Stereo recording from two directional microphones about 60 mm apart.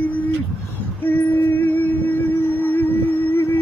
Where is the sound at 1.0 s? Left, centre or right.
Left.